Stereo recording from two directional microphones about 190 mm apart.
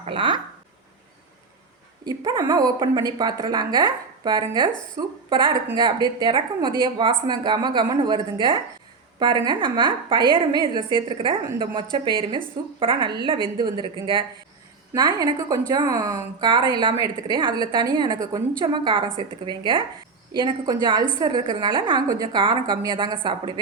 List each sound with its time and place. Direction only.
0.0 s speech: 25° right (ahead or behind)
2.0 s a woman's voice: 20° right (ahead or behind)